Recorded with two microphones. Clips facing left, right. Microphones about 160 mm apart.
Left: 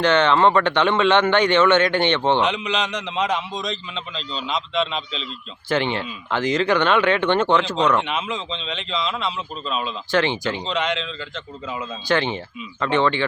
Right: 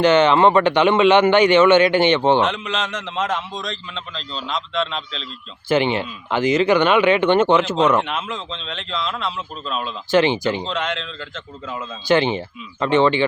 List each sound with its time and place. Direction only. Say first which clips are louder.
0.0 s speech: right 3 dB; 10° right (ahead or behind)
5.6 s speech: right 4 dB; 10° right (ahead or behind)
12.0 s speech: right 5 dB; 25° right (ahead or behind)